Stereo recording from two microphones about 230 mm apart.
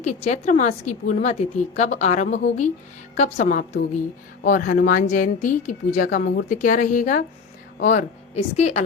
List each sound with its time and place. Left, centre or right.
0.0 s speech: left